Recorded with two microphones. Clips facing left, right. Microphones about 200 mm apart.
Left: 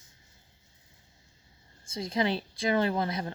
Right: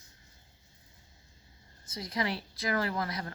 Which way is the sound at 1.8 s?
25° left (ahead or behind).